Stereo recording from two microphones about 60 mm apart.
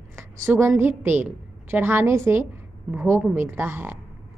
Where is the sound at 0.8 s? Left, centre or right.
Right.